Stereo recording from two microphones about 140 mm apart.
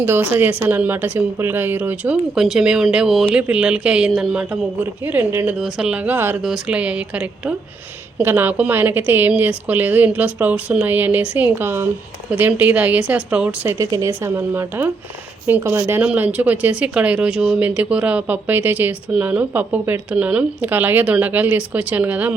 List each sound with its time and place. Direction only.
0.0 s speech: 15° right (ahead or behind)
2.3 s speech: 5° right (ahead or behind)
5.0 s speech: 15° right (ahead or behind)
5.5 s speech: 5° right (ahead or behind)
13.7 s speech: 20° right (ahead or behind)